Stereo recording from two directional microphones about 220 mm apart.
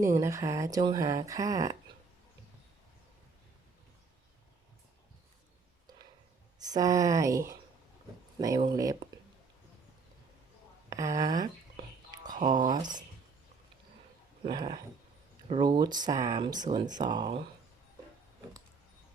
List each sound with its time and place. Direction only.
0.0 s speech: 15° right (ahead or behind)
6.7 s speech: 15° right (ahead or behind)
10.8 s speech: 15° right (ahead or behind)
12.1 s a sound: 15° right (ahead or behind)
12.5 s speech: 20° right (ahead or behind)
14.4 s speech: 20° right (ahead or behind)